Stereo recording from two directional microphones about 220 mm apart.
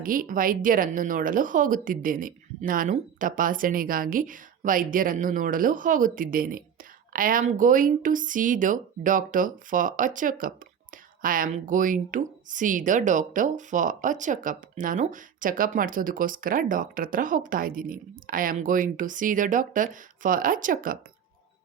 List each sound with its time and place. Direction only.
0.0 s a woman's voice: 40° right (ahead or behind)